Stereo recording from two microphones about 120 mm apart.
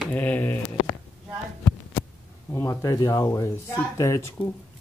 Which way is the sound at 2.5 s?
20° left (ahead or behind).